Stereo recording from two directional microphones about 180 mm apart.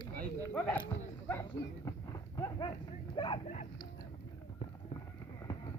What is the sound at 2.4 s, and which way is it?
Dog, 20° left (ahead or behind).